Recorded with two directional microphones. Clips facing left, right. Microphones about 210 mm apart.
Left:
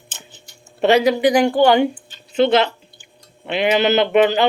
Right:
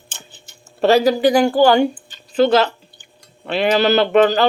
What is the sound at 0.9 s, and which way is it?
Speech, 20° left (ahead or behind).